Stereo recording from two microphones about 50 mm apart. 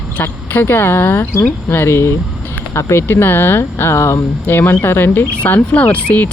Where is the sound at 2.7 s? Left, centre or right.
Left.